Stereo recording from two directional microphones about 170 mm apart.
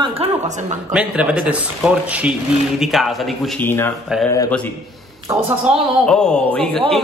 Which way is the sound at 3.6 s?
15° left (ahead or behind).